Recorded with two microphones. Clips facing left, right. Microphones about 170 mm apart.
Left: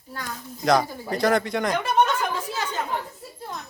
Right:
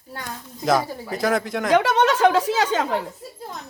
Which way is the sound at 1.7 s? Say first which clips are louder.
Right 6 dB; 90° right.